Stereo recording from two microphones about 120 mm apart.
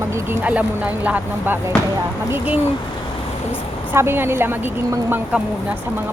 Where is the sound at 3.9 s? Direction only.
20° right (ahead or behind).